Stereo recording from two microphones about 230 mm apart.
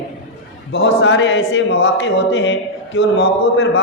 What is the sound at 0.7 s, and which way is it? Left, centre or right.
A man's voice, left.